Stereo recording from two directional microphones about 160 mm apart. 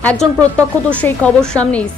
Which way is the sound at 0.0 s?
10° left (ahead or behind).